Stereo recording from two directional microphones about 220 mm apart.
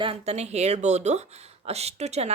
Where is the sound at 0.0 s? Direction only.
25° right (ahead or behind).